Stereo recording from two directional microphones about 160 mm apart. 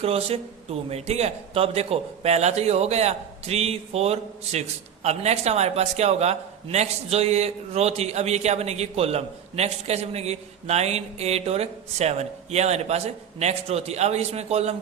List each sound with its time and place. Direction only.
0.0 s a man's voice: 40° right (ahead or behind)